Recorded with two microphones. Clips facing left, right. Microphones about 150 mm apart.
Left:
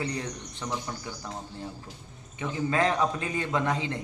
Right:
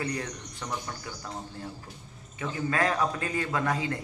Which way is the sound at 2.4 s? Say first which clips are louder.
Left 2 dB; 20° left (ahead or behind).